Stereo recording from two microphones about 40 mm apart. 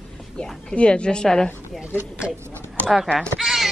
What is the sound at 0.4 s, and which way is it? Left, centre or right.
A woman's voice, left.